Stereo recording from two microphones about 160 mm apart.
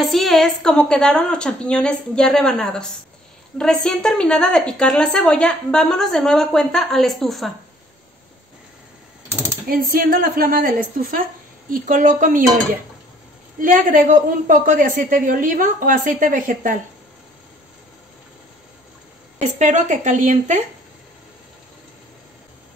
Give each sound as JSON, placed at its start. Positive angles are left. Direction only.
{"t": 0.0, "sound": "a woman's voice", "side_deg": 0}
{"t": 9.7, "sound": "speech", "side_deg": -60}
{"t": 13.6, "sound": "speech", "side_deg": -55}
{"t": 19.4, "sound": "speech", "side_deg": -50}